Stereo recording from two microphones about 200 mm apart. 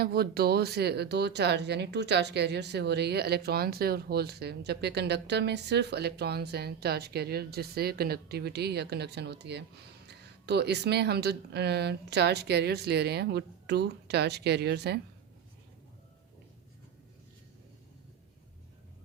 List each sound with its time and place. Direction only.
0.0 s speech: 50° right (ahead or behind)